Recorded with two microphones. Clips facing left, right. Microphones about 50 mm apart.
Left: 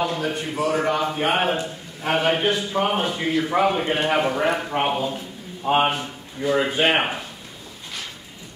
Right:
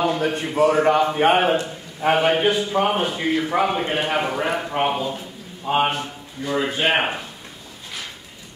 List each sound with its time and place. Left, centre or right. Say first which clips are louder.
0.2 s a man's voice: right 5 dB; right
0.9 s a man's voice: right 5 dB; centre
7.0 s a man's voice: right 1 dB; centre